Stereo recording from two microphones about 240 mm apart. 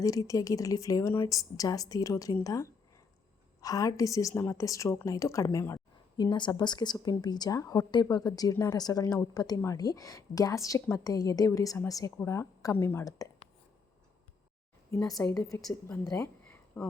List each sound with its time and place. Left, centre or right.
0.0 s a woman's voice: centre
14.8 s a woman's voice: centre